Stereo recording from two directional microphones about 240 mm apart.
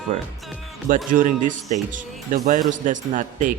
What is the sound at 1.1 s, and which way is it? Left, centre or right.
Speech, right.